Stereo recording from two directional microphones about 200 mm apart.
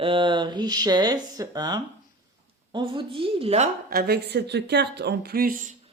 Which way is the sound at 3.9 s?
55° right (ahead or behind).